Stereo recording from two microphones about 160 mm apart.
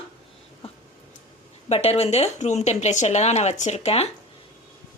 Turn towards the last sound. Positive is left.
turn(degrees=40)  # may be behind; listen again after turning